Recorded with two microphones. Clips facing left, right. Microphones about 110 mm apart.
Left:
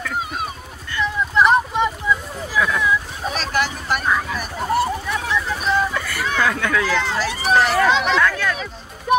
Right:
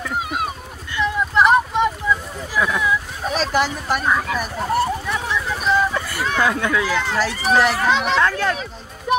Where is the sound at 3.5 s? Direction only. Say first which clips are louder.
Even; 30° right (ahead or behind).